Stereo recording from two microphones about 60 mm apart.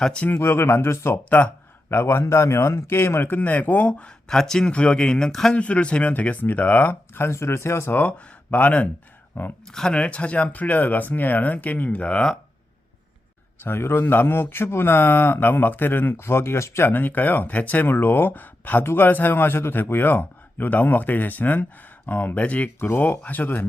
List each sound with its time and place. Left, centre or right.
0.0 s speech: centre
0.3 s speech: left
1.3 s speech: left
1.9 s a man's voice: left; by 5.5 s centre
5.5 s speech: left
7.3 s speech: left
7.9 s a man's voice: left
9.7 s speech: centre
13.6 s a man's voice: left
16.2 s speech: left
16.9 s a man's voice: left